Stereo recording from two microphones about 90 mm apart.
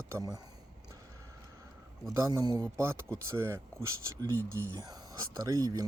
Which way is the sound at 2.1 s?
35° right (ahead or behind).